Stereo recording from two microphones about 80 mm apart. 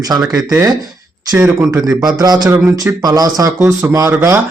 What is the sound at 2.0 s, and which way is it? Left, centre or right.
Speech, right.